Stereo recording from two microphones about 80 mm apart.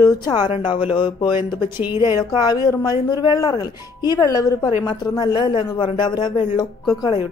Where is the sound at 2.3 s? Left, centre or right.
Left.